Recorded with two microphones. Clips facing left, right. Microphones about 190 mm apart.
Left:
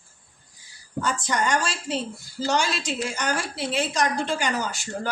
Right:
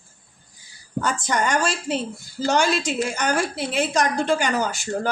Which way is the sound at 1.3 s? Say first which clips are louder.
Right 3 dB; 50° right (ahead or behind).